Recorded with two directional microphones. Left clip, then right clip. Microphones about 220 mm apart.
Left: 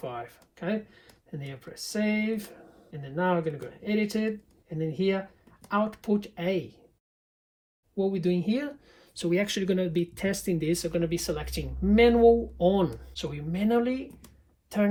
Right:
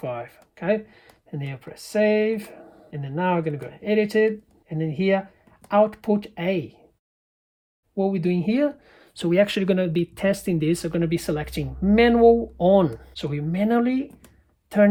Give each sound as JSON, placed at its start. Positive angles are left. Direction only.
{"t": 0.0, "sound": "speech", "side_deg": -45}
{"t": 7.9, "sound": "speech", "side_deg": -40}